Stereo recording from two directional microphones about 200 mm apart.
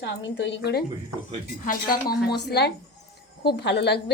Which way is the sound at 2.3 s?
55° left (ahead or behind).